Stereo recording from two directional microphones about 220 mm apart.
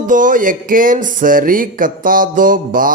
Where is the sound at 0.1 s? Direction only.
35° right (ahead or behind).